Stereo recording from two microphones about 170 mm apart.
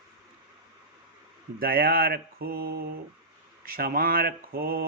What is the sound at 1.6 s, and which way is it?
Mantra, 60° right (ahead or behind).